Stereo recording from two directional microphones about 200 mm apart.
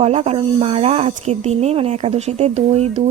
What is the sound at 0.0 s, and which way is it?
A woman's voice, 30° right (ahead or behind).